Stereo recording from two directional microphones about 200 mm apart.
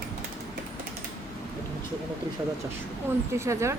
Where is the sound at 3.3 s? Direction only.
15° right (ahead or behind).